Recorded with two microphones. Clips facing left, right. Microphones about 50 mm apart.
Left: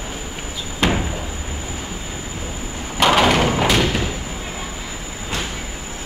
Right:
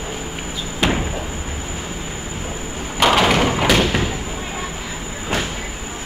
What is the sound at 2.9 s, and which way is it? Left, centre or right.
Thump, centre.